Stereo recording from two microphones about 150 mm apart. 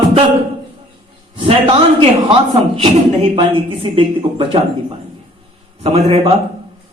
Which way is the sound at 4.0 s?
35° right (ahead or behind).